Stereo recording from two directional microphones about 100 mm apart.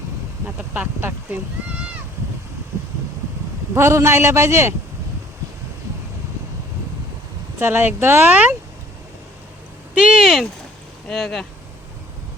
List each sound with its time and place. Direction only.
0.4 s speech: 15° right (ahead or behind)
3.8 s speech: 25° right (ahead or behind)
7.6 s speech: 20° right (ahead or behind)
9.9 s a sound: 10° right (ahead or behind)
11.1 s speech: 5° left (ahead or behind)